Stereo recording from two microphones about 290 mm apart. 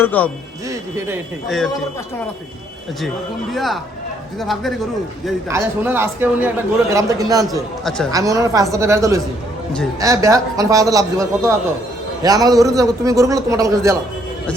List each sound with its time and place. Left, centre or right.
0.0 s a man's voice: centre
0.7 s a man's voice: centre
3.5 s a man's voice: centre
7.9 s a man's voice: centre
8.1 s a man's voice: centre